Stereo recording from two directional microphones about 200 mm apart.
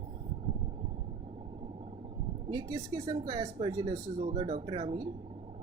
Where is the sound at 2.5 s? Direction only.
20° right (ahead or behind).